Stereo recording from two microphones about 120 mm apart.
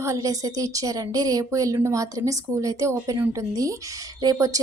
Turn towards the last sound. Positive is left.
turn(degrees=-30)  # may be behind; listen again after turning